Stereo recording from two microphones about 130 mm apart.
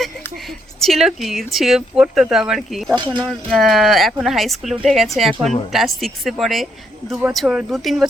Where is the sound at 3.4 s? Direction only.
Centre (ahead or behind).